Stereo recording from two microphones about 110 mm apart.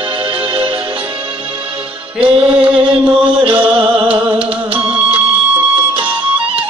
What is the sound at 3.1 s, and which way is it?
Music, 55° right (ahead or behind).